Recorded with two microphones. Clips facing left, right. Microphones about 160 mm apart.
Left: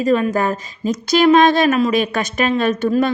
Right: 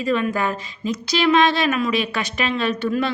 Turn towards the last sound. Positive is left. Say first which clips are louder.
# left 5 dB
turn(degrees=45)  # may be behind; listen again after turning